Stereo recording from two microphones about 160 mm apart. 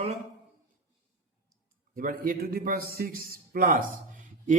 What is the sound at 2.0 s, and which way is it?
Speech, 60° right (ahead or behind).